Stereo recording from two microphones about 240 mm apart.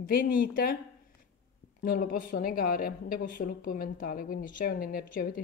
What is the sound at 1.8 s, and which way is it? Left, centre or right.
Speech, left.